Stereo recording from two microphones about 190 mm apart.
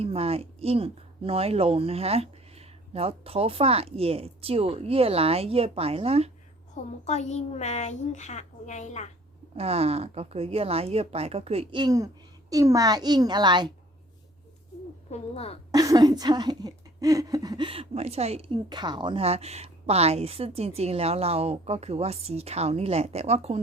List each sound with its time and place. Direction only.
0.0 s speech: 30° right (ahead or behind)
7.0 s a woman's voice: 35° left (ahead or behind)
9.6 s speech: 30° right (ahead or behind)
15.1 s a woman's voice: 30° left (ahead or behind)
15.7 s speech: 20° right (ahead or behind)